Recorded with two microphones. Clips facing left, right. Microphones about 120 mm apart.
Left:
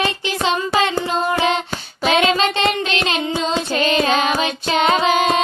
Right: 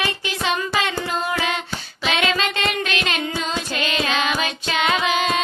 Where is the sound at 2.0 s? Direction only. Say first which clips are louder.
Left 6 dB; 40° left (ahead or behind).